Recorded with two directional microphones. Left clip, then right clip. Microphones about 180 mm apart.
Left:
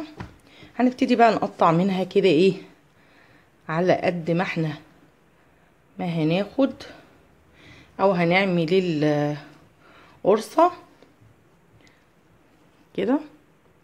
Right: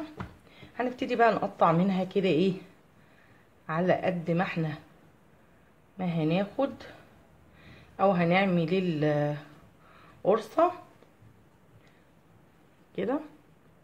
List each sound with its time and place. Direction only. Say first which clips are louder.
0.5 s speech: left 9 dB; 55° left (ahead or behind)
3.6 s speech: left 6 dB; 55° left (ahead or behind)
5.9 s a woman's voice: left 5 dB; 55° left (ahead or behind)
12.9 s speech: left 7 dB; 50° left (ahead or behind)